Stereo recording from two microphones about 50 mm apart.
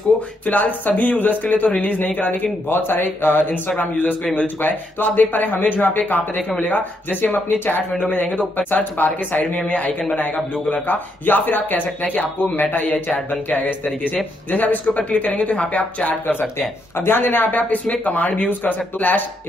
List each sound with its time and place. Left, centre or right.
0.5 s speech: left
7.9 s a man's voice: left
16.3 s speech: left